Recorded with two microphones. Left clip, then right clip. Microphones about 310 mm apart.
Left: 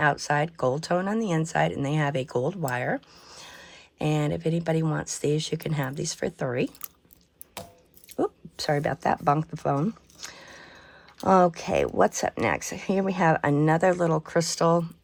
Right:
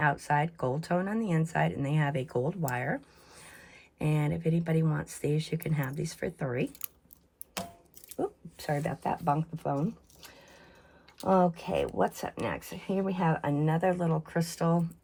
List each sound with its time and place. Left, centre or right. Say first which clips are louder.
0.0 s speech: left 4 dB; centre
8.6 s speech: left 7 dB; left
11.2 s speech: left 6 dB; left
11.7 s speech: left 7 dB; left
13.7 s speech: left 7 dB; centre